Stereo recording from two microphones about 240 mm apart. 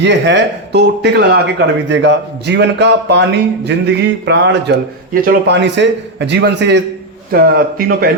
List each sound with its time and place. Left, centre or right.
0.0 s speech: right
5.1 s speech: right